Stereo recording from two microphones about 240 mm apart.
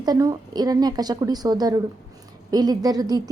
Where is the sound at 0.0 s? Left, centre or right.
Centre.